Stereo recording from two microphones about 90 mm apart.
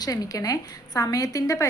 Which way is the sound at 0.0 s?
45° left (ahead or behind).